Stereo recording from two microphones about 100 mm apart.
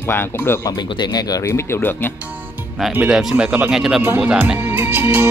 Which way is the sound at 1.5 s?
25° left (ahead or behind).